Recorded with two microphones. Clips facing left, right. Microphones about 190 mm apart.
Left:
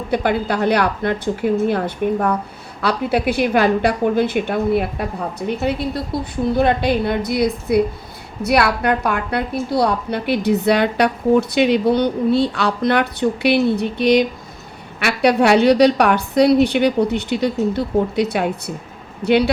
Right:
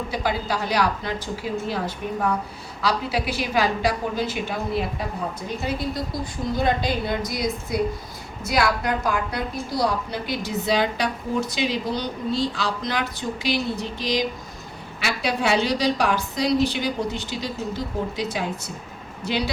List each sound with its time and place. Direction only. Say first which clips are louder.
0.1 s a woman's voice: left 10 dB; 60° left (ahead or behind)